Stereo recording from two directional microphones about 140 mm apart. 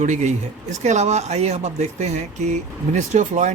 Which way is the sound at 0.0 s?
55° right (ahead or behind).